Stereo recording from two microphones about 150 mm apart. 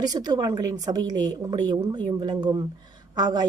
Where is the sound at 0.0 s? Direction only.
25° right (ahead or behind).